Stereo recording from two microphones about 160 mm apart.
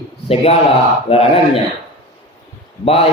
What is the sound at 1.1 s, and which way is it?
Speech, 40° left (ahead or behind).